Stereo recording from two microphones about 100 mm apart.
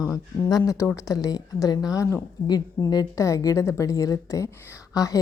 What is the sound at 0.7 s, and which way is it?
A woman's voice, 30° left (ahead or behind).